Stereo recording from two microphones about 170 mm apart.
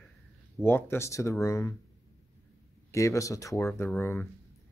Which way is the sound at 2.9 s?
20° left (ahead or behind).